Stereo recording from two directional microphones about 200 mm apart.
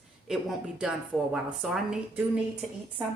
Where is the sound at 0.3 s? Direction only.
Centre (ahead or behind).